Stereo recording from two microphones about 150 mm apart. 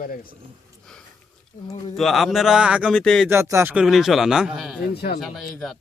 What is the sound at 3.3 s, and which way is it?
Speech, 20° right (ahead or behind).